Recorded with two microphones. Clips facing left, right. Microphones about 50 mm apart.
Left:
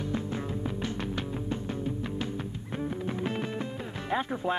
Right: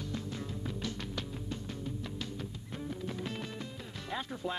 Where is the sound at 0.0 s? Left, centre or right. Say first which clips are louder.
Left 7 dB; left.